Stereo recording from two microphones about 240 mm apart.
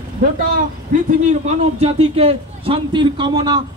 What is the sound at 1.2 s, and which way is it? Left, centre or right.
A man's voice, right.